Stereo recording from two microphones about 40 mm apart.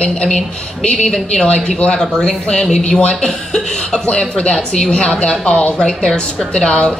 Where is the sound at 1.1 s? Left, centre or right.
Left.